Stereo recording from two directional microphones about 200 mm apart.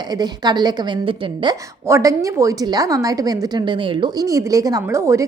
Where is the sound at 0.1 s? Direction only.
20° right (ahead or behind).